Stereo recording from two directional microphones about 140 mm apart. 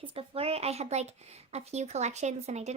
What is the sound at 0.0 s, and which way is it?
Speech, 40° right (ahead or behind).